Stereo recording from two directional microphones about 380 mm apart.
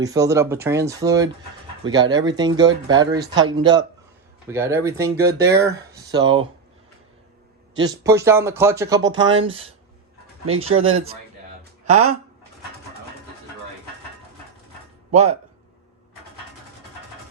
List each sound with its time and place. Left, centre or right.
0.0 s speech: centre
7.8 s speech: centre
10.7 s speech: right
15.1 s speech: right